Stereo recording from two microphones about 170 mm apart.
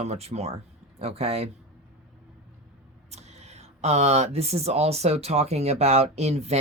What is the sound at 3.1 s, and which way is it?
Speech, 40° right (ahead or behind).